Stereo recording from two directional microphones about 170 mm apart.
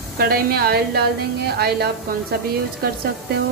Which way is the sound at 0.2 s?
65° right (ahead or behind).